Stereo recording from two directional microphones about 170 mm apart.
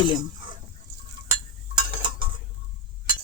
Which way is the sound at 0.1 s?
25° right (ahead or behind).